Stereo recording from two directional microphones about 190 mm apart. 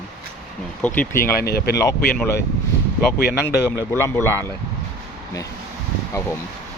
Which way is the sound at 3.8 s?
15° left (ahead or behind).